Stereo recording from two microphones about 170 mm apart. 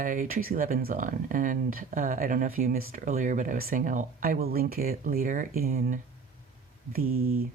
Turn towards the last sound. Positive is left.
turn(degrees=-60)  # may be behind; listen again after turning